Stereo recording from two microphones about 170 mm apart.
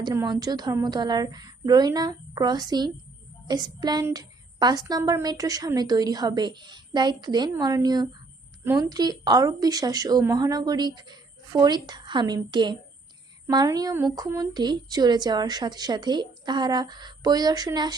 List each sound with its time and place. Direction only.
0.0 s a woman's voice: 20° right (ahead or behind)